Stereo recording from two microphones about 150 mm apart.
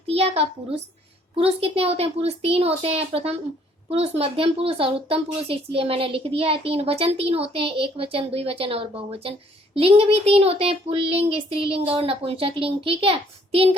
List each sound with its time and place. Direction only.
0.1 s a child's voice: 45° right (ahead or behind)